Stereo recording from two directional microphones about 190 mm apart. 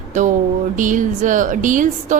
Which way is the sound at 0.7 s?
45° right (ahead or behind).